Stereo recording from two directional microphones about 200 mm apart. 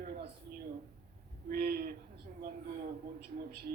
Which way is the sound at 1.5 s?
50° right (ahead or behind).